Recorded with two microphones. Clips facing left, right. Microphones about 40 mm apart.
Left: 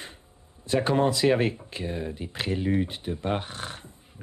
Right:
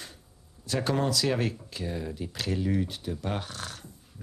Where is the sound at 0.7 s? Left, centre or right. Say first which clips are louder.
Left 5 dB; left.